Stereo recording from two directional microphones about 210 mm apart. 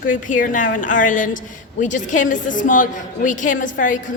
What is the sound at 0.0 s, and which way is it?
A woman's voice, 40° left (ahead or behind).